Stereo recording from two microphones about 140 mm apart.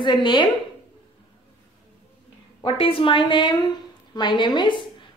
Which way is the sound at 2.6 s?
40° left (ahead or behind).